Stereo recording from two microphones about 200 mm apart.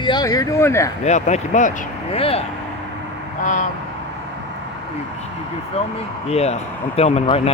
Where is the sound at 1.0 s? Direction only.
35° left (ahead or behind).